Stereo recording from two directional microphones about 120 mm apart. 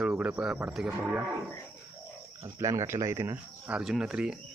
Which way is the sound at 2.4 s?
25° right (ahead or behind).